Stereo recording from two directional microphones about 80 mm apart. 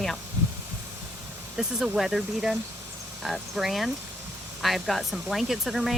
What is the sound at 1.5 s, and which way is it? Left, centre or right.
Speech, centre.